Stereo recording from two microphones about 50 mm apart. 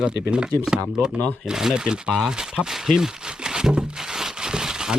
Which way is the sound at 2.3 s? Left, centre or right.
Centre.